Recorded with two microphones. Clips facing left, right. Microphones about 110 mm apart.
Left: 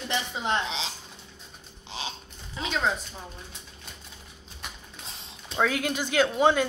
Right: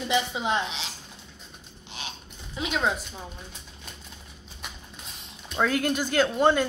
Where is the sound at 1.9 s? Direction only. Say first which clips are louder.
Left 4 dB; 30° left (ahead or behind).